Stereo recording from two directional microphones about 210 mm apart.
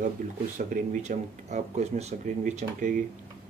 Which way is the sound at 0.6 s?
40° right (ahead or behind).